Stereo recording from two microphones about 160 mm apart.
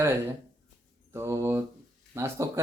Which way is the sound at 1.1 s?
15° right (ahead or behind).